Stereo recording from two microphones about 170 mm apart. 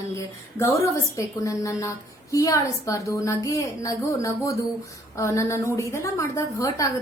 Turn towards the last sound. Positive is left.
turn(degrees=20)  # may be behind; listen again after turning